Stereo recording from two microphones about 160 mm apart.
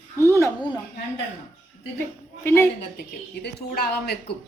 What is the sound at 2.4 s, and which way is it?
Speech, 15° left (ahead or behind).